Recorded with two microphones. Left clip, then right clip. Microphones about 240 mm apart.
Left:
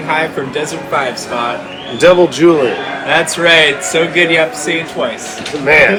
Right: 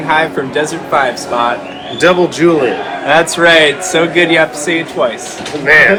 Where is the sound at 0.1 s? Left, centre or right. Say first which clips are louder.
Right 3 dB; centre.